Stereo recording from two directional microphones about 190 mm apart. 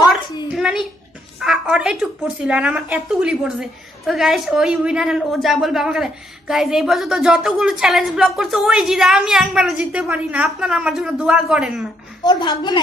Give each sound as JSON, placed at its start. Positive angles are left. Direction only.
{"t": 0.1, "sound": "a sound", "side_deg": -5}
{"t": 1.4, "sound": "a woman's voice", "side_deg": -5}
{"t": 12.2, "sound": "a woman's voice", "side_deg": 25}